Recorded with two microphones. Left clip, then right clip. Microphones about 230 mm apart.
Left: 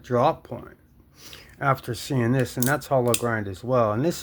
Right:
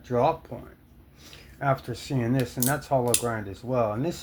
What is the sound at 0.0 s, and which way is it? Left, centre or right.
Speech, left.